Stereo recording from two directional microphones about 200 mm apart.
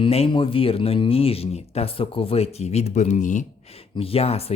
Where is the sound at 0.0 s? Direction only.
25° left (ahead or behind).